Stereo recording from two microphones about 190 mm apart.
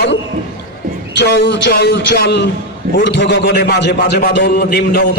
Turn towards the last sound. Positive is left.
turn(degrees=55)  # may be behind; listen again after turning